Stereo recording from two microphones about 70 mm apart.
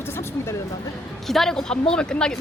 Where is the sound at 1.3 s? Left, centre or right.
Centre.